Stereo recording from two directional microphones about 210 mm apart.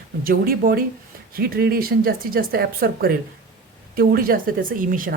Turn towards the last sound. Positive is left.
turn(degrees=-40)  # may be behind; listen again after turning